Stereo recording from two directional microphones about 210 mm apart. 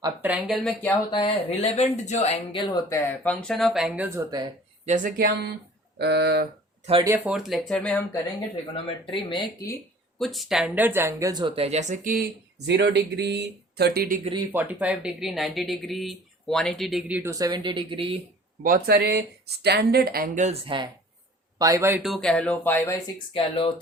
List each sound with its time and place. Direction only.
0.0 s speech: 5° right (ahead or behind)
0.9 s speech: 25° left (ahead or behind)
3.2 s speech: 5° left (ahead or behind); by 4.4 s 15° right (ahead or behind)
4.9 s speech: 40° right (ahead or behind)
7.0 s speech: 10° right (ahead or behind)
8.7 s speech: 25° left (ahead or behind)
10.2 s speech: centre (ahead or behind); by 12.2 s 40° right (ahead or behind)
12.6 s speech: 55° right (ahead or behind)
14.5 s speech: 10° right (ahead or behind); by 18.2 s 25° right (ahead or behind)
18.6 s speech: 45° right (ahead or behind); by 23.0 s 10° left (ahead or behind)
23.1 s speech: 25° left (ahead or behind)